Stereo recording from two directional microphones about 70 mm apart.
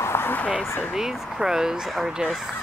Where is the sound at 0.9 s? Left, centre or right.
Centre.